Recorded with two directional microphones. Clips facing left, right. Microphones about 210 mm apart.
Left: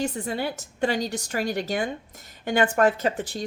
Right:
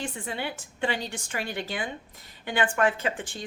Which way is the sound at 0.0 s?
40° left (ahead or behind).